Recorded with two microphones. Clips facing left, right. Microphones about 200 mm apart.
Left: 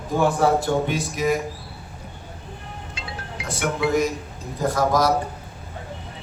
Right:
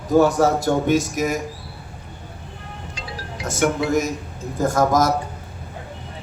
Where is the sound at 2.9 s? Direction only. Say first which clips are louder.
Right 2 dB; 40° right (ahead or behind).